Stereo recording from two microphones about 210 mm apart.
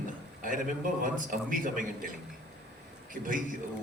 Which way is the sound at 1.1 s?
40° right (ahead or behind).